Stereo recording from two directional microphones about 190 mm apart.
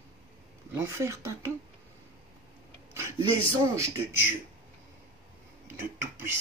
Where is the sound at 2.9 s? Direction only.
15° right (ahead or behind).